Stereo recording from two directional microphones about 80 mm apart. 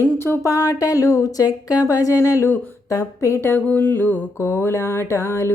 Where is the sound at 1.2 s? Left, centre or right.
Left.